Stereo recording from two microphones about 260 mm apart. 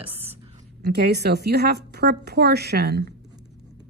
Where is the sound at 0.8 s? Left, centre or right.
Right.